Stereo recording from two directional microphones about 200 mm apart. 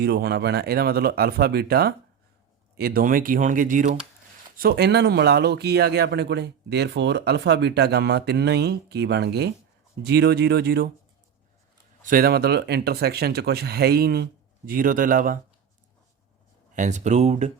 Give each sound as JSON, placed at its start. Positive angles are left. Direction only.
{"t": 0.0, "sound": "speech", "side_deg": -55}
{"t": 12.0, "sound": "speech", "side_deg": -50}
{"t": 16.7, "sound": "speech", "side_deg": -35}